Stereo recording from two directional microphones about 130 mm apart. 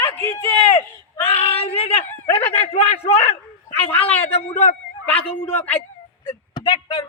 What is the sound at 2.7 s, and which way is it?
Speech, 55° left (ahead or behind).